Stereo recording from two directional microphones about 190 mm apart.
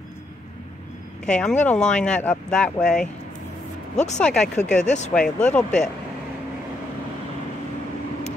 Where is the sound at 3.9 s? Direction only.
40° left (ahead or behind).